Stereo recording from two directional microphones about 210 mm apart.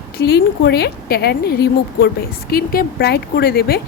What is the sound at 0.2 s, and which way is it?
A woman's voice, 50° left (ahead or behind).